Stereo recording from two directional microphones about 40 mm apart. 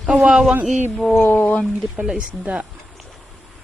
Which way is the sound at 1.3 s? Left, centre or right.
Left.